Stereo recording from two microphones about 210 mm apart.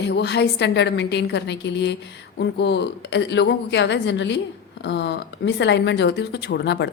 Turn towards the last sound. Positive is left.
turn(degrees=55)  # may be behind; listen again after turning